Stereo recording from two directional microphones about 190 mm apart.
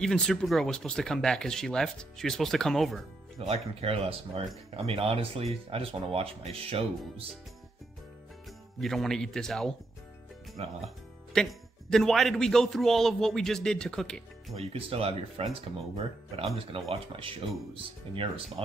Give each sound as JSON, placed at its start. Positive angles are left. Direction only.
{"t": 0.0, "sound": "speech", "side_deg": 5}
{"t": 3.3, "sound": "speech", "side_deg": -30}
{"t": 8.8, "sound": "speech", "side_deg": 0}
{"t": 10.6, "sound": "speech", "side_deg": -35}
{"t": 11.3, "sound": "speech", "side_deg": 5}
{"t": 14.5, "sound": "speech", "side_deg": -30}
{"t": 16.9, "sound": "speech", "side_deg": -30}